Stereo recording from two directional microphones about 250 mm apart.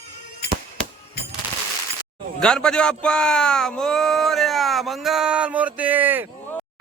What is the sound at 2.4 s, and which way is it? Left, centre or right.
Speech, centre.